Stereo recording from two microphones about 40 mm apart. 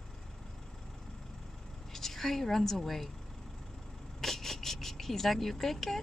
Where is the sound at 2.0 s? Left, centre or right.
Centre.